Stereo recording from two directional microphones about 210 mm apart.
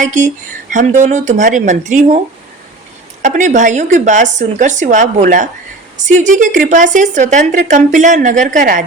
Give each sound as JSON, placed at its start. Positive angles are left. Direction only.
{"t": 0.0, "sound": "a woman's voice", "side_deg": -35}
{"t": 3.2, "sound": "a woman's voice", "side_deg": -35}